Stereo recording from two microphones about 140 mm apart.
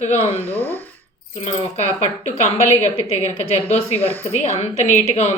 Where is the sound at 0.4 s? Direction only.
15° left (ahead or behind).